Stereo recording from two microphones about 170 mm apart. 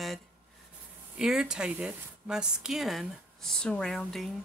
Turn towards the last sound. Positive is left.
turn(degrees=0)  # may be behind; listen again after turning